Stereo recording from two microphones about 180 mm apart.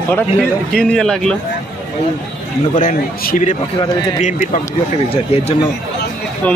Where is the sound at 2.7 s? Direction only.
50° left (ahead or behind).